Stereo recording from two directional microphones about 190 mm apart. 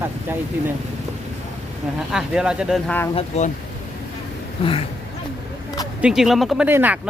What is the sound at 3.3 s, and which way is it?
Speech, 35° left (ahead or behind).